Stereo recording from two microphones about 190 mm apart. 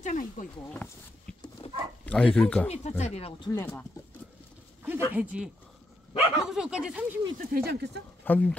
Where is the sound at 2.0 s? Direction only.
5° left (ahead or behind).